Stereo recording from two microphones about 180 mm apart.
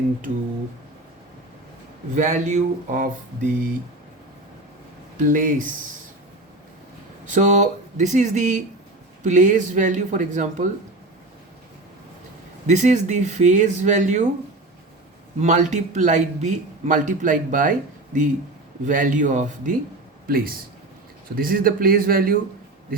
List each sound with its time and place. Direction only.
2.1 s a man's voice: 40° right (ahead or behind)
5.2 s a man's voice: 50° right (ahead or behind)
7.3 s a man's voice: 45° right (ahead or behind)
12.6 s speech: 40° right (ahead or behind)
15.4 s a man's voice: 40° right (ahead or behind)
20.2 s a man's voice: 55° right (ahead or behind)